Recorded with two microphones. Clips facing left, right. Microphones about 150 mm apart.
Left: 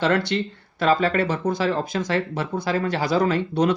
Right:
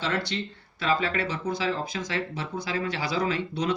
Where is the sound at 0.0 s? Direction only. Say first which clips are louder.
Left 8 dB; 60° left (ahead or behind).